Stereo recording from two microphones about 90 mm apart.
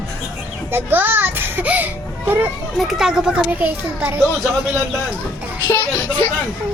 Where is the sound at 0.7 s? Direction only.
25° right (ahead or behind).